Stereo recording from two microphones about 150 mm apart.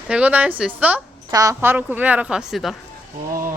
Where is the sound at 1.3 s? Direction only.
25° right (ahead or behind); by 2.7 s centre (ahead or behind).